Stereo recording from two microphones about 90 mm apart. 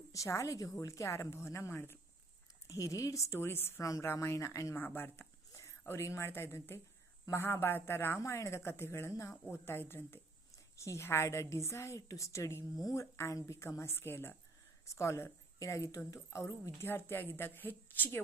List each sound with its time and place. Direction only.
0.1 s a woman's voice: 35° left (ahead or behind)
2.6 s a woman's voice: 35° left (ahead or behind)
4.8 s a woman's voice: 25° left (ahead or behind)